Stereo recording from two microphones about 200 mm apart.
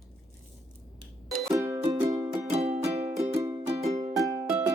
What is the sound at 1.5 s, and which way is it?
Music, 10° right (ahead or behind).